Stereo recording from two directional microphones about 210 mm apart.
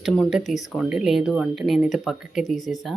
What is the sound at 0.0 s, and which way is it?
Speech, centre (ahead or behind).